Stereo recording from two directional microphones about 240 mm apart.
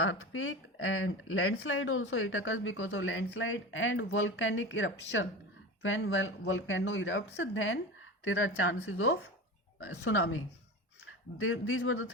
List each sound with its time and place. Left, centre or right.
0.0 s speech: left